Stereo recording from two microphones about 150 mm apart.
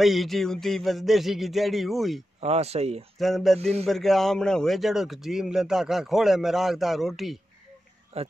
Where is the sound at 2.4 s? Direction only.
45° right (ahead or behind).